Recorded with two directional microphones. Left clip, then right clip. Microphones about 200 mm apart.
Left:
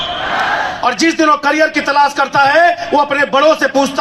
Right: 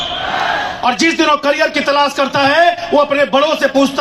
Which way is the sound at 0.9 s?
25° left (ahead or behind).